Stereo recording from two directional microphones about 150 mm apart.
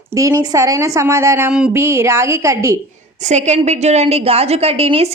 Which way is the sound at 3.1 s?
50° right (ahead or behind).